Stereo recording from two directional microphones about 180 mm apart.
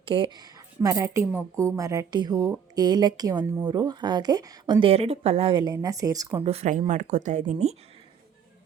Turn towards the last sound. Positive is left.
turn(degrees=-40)  # may be behind; listen again after turning